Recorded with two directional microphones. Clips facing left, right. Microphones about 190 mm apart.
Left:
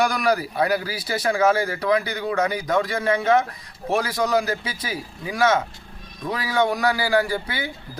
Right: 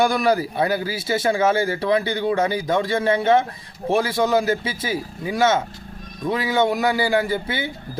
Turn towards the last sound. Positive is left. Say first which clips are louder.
# right 1 dB
turn(degrees=-25)  # may be behind; listen again after turning